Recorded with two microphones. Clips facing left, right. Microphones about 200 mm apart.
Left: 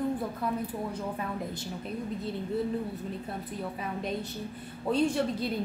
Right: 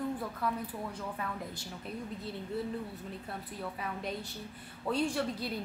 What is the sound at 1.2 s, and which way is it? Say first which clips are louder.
Speech: left 5 dB; 20° left (ahead or behind).